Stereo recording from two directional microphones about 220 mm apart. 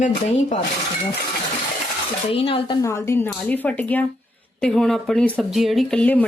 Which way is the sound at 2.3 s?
25° left (ahead or behind).